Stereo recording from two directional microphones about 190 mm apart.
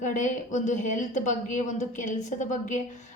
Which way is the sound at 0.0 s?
40° left (ahead or behind).